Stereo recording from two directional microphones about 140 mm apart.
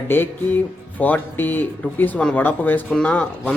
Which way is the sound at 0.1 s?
15° left (ahead or behind).